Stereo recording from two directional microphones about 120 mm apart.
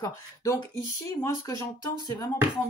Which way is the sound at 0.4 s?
25° left (ahead or behind).